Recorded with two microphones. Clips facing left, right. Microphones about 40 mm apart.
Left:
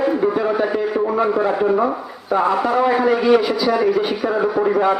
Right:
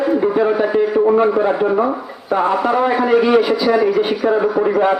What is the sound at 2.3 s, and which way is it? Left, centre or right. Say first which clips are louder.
Speech: right 1 dB; right.